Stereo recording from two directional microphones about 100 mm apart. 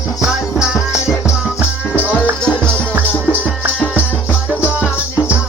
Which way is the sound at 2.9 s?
15° right (ahead or behind).